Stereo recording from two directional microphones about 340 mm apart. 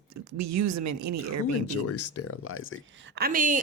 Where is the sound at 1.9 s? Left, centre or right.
Left.